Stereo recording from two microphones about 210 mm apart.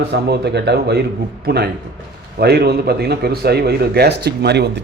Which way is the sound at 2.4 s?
50° right (ahead or behind).